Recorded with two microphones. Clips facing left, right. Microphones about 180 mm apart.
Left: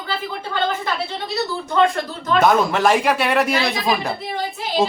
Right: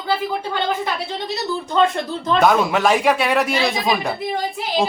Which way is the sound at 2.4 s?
Centre (ahead or behind).